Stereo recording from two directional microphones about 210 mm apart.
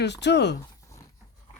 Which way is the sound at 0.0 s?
55° left (ahead or behind).